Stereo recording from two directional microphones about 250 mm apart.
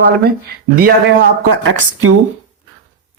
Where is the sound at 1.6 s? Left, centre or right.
Right.